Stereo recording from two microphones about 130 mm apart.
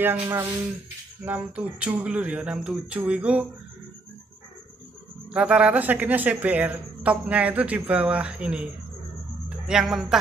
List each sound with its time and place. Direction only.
0.0 s speech: 20° right (ahead or behind)
5.3 s speech: 5° right (ahead or behind)
9.7 s speech: 5° right (ahead or behind)